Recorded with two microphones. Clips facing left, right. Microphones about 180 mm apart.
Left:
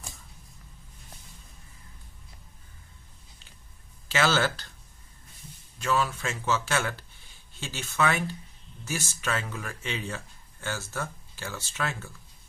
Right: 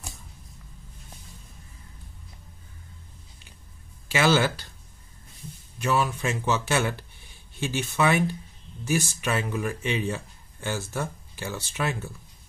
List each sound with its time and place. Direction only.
4.1 s speech: 15° right (ahead or behind)
5.8 s speech: 15° right (ahead or behind)